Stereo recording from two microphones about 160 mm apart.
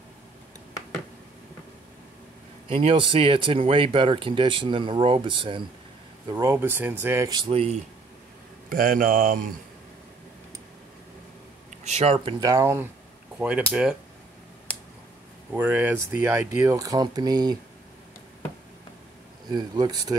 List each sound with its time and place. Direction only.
2.7 s speech: 35° right (ahead or behind)
6.2 s speech: 20° right (ahead or behind); by 7.8 s 40° right (ahead or behind)
8.6 s speech: 60° right (ahead or behind)
11.8 s speech: 45° right (ahead or behind)
12.4 s speech: 20° right (ahead or behind)
15.5 s speech: 10° right (ahead or behind); by 17.6 s 25° right (ahead or behind)
19.5 s speech: 25° right (ahead or behind)